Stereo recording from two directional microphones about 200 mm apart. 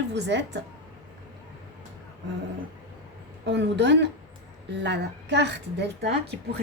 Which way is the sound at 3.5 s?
60° right (ahead or behind).